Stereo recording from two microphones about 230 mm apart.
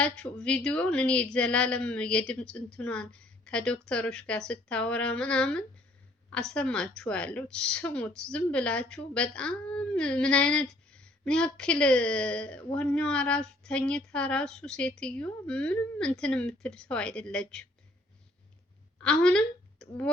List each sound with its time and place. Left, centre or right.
0.0 s a woman's voice: centre
19.0 s speech: centre